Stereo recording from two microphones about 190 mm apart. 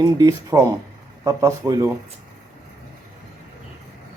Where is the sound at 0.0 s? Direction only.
20° right (ahead or behind).